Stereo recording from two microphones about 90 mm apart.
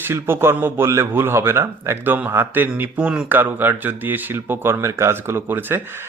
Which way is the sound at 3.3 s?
20° right (ahead or behind).